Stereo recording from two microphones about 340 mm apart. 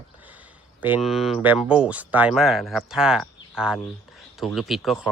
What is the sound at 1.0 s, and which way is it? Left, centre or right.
Speech, centre.